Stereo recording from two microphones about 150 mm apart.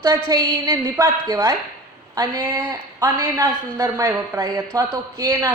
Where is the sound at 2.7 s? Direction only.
20° right (ahead or behind).